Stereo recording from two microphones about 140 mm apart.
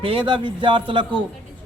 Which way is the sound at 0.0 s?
40° right (ahead or behind).